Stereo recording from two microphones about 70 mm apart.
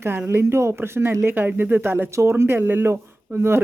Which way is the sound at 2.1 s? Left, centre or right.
Right.